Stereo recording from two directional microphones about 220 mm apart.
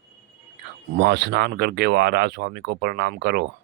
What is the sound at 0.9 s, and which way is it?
Speech, 50° right (ahead or behind).